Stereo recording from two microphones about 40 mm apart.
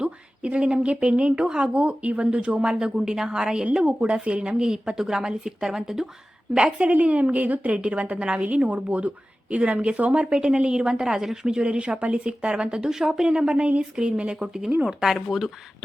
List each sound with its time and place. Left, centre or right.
0.0 s speech: right
6.7 s speech: right
7.7 s speech: right; by 13.3 s centre
13.3 s speech: right
13.9 s speech: right